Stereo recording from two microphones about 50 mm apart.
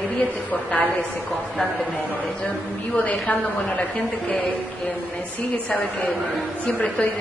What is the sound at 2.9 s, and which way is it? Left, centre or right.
Speech, left.